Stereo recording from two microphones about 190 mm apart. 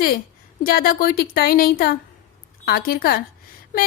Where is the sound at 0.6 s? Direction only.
50° left (ahead or behind).